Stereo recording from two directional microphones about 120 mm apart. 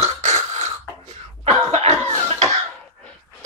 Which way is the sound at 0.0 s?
70° right (ahead or behind).